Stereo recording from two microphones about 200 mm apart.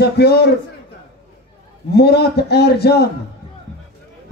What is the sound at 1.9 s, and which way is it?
Speech, 55° left (ahead or behind).